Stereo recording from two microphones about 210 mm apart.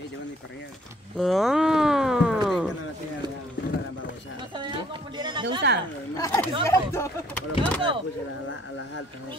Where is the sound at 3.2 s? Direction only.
20° right (ahead or behind).